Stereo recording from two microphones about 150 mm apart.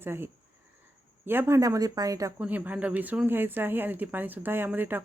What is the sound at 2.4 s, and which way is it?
Speech, 10° right (ahead or behind).